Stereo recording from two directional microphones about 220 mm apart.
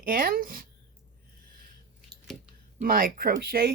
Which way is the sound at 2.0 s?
Centre (ahead or behind).